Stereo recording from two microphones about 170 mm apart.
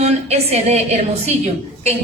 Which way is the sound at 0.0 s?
40° right (ahead or behind).